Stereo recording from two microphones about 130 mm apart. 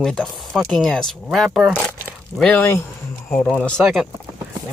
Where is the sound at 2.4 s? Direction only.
10° left (ahead or behind).